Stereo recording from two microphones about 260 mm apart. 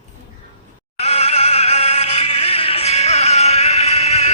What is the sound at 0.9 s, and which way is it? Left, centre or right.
Music, left.